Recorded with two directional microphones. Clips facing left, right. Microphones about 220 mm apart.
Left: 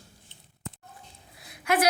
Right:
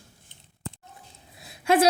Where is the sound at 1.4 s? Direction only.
25° right (ahead or behind).